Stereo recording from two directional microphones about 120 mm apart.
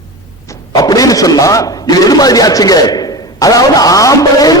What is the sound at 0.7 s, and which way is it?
A man's voice, 30° left (ahead or behind).